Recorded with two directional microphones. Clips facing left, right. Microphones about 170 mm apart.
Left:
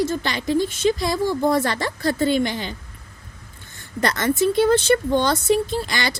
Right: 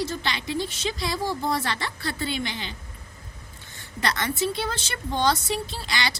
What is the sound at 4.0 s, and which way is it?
A woman's voice, 50° left (ahead or behind).